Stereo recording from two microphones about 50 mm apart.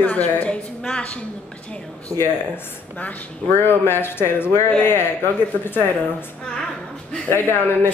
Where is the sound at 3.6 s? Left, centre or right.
Left.